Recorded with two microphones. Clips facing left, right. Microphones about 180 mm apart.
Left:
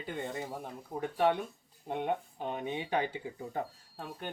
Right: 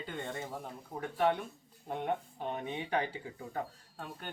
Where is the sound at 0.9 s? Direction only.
10° left (ahead or behind).